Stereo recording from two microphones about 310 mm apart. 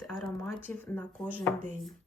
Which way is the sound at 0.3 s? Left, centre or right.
Centre.